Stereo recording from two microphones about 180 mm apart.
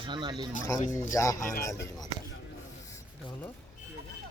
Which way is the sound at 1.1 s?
15° left (ahead or behind).